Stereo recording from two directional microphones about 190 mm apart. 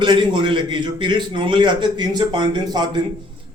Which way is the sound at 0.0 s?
25° right (ahead or behind).